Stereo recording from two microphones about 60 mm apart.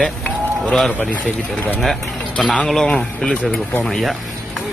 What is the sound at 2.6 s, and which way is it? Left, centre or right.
Speech, centre.